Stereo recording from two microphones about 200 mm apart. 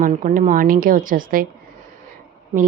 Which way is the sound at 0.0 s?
40° right (ahead or behind).